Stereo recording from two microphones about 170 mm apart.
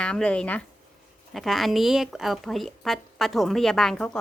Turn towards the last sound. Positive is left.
turn(degrees=5)  # may be behind; listen again after turning